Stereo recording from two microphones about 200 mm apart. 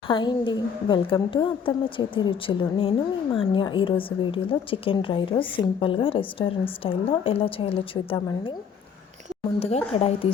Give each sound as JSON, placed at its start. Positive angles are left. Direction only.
{"t": 0.1, "sound": "speech", "side_deg": 25}
{"t": 9.6, "sound": "speech", "side_deg": 30}